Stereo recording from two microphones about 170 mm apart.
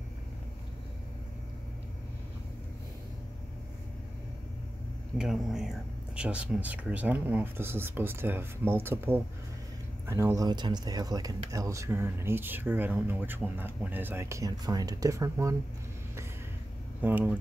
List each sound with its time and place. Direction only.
5.1 s speech: 5° right (ahead or behind); by 15.5 s 20° right (ahead or behind)
17.0 s speech: 10° right (ahead or behind)